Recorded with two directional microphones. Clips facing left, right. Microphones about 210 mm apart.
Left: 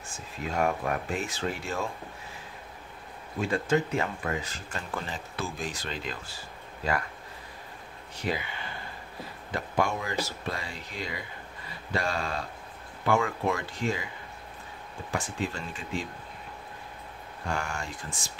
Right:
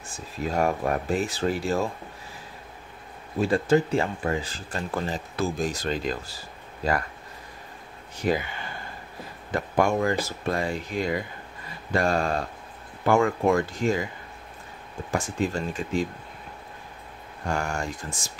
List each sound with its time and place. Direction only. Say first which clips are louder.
0.4 s speech: right 4 dB; 35° right (ahead or behind)
3.3 s speech: right 5 dB; 35° right (ahead or behind)
8.2 s speech: right 7 dB; 45° right (ahead or behind)
9.5 s speech: right 6 dB; 50° right (ahead or behind)
15.0 s speech: right 5 dB; 45° right (ahead or behind)
17.5 s speech: right 5 dB; 45° right (ahead or behind)